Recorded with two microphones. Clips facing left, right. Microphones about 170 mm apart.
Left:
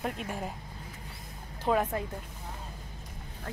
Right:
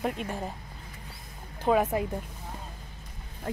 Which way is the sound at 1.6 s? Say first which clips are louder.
Right 4 dB; 5° right (ahead or behind).